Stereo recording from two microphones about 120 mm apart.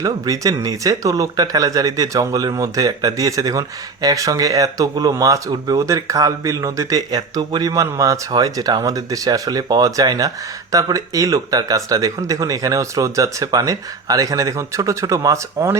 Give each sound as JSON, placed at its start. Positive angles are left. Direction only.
{"t": 0.0, "sound": "speech", "side_deg": -30}